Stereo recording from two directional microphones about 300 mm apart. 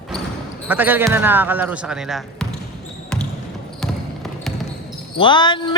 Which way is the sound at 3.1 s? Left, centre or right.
Centre.